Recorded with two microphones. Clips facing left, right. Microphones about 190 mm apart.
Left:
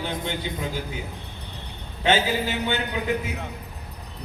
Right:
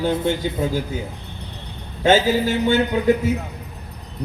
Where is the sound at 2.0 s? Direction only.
40° right (ahead or behind).